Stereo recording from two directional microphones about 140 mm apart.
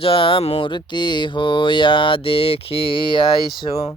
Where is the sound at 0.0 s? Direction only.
40° left (ahead or behind).